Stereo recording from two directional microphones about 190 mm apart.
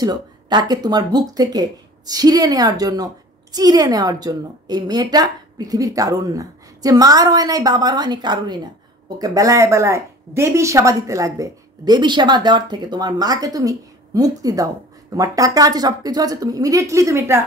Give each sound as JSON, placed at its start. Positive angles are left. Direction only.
{"t": 0.0, "sound": "speech", "side_deg": -20}